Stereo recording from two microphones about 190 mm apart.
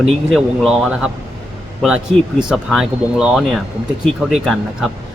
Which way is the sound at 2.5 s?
5° right (ahead or behind).